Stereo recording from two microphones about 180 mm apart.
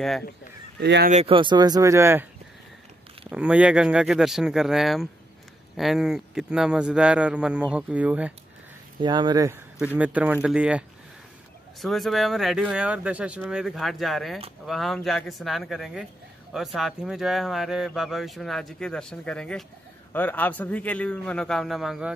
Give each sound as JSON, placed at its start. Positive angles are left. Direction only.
{"t": 0.7, "sound": "speech", "side_deg": -70}
{"t": 1.1, "sound": "speech", "side_deg": -30}
{"t": 3.3, "sound": "speech", "side_deg": -5}
{"t": 9.0, "sound": "speech", "side_deg": -25}
{"t": 9.9, "sound": "a man's voice", "side_deg": -10}